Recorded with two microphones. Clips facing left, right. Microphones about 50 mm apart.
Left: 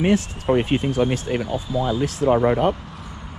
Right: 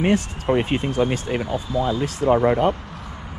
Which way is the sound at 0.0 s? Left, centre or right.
Right.